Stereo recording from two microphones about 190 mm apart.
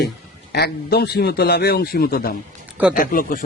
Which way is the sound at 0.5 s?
60° left (ahead or behind).